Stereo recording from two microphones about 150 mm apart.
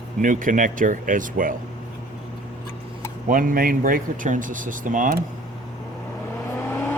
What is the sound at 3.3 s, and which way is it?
Speech, 65° right (ahead or behind).